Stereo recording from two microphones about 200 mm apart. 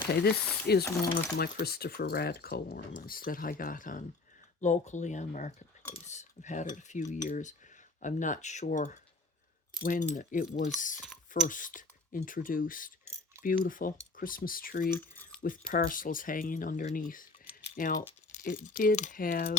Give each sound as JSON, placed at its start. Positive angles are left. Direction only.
{"t": 0.1, "sound": "speech", "side_deg": 55}
{"t": 0.9, "sound": "speech", "side_deg": 20}
{"t": 1.4, "sound": "speech", "side_deg": 50}
{"t": 14.9, "sound": "a sound", "side_deg": 10}
{"t": 15.4, "sound": "speech", "side_deg": 45}
{"t": 17.5, "sound": "keys jangling", "side_deg": 40}
{"t": 18.4, "sound": "speech", "side_deg": 45}